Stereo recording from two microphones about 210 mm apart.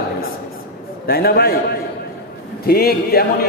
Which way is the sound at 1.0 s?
45° left (ahead or behind).